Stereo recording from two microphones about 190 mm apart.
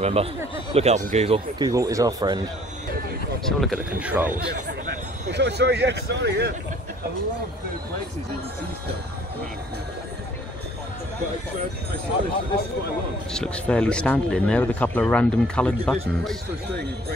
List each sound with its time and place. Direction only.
0.0 s speech: 30° right (ahead or behind)
1.6 s speech: 15° right (ahead or behind)
3.4 s speech: centre (ahead or behind)
5.3 s speech: 60° right (ahead or behind)
13.3 s speech: 5° left (ahead or behind)